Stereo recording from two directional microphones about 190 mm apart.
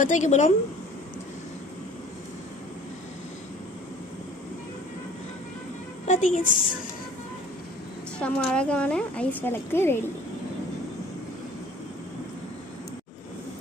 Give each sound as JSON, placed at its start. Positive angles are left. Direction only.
{"t": 0.0, "sound": "a woman's voice", "side_deg": 40}
{"t": 6.1, "sound": "a woman's voice", "side_deg": 40}
{"t": 8.2, "sound": "a woman's voice", "side_deg": 5}